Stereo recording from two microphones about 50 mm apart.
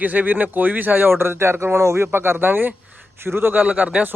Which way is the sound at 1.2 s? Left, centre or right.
Right.